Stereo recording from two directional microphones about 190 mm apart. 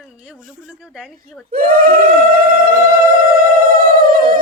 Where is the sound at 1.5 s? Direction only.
50° right (ahead or behind).